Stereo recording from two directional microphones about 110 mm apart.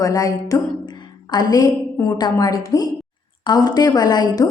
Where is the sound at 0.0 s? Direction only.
35° left (ahead or behind).